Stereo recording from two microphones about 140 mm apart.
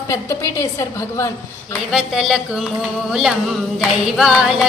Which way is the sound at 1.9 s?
Centre (ahead or behind).